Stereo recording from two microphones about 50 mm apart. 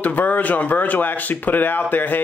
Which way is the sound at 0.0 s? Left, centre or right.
Left.